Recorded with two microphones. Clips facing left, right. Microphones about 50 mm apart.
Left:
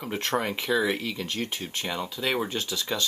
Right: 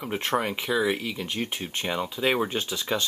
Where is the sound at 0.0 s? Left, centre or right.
Centre.